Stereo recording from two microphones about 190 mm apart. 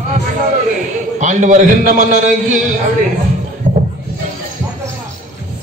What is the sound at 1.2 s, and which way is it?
Speech, 40° right (ahead or behind).